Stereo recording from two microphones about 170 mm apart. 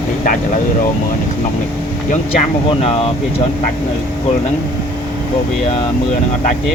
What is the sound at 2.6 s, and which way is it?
Speech, 35° left (ahead or behind).